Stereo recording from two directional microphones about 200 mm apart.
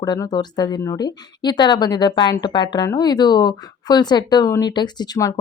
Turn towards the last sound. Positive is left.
turn(degrees=20)  # may be behind; listen again after turning